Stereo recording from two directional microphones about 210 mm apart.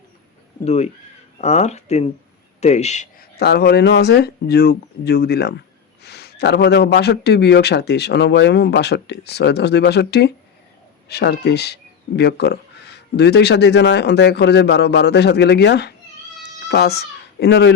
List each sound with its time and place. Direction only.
0.6 s speech: 30° left (ahead or behind)
3.3 s speech: 50° left (ahead or behind)